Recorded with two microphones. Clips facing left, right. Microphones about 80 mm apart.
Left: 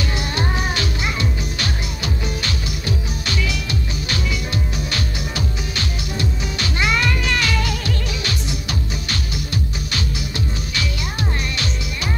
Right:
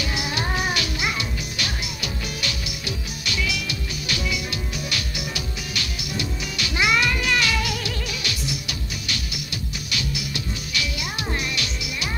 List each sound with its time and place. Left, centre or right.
0.1 s music: centre
3.3 s music: left
4.9 s music: left
6.8 s music: centre
7.8 s music: left